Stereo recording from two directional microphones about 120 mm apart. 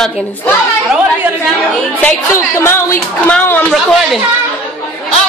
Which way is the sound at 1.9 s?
20° left (ahead or behind).